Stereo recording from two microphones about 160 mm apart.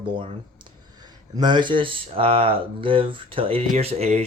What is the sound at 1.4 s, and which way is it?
Speech, 30° right (ahead or behind).